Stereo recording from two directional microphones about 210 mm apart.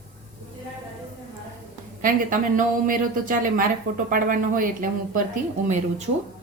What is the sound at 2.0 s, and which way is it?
A woman's voice, 40° right (ahead or behind).